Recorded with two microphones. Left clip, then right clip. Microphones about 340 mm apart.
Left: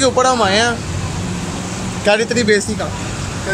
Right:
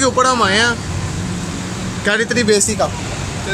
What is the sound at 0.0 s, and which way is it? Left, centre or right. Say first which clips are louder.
Speech: even; centre.